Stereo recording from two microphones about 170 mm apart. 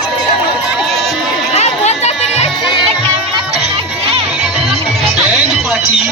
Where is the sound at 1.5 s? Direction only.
40° left (ahead or behind).